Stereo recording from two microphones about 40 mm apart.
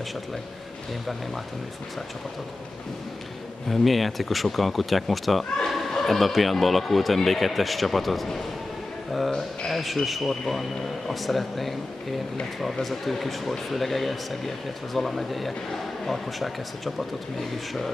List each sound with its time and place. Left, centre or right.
3.6 s speech: centre
9.7 s speech: centre
12.8 s speech: centre